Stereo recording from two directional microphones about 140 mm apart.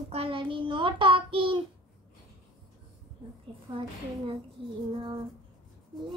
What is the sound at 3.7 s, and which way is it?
Child singing, 40° right (ahead or behind).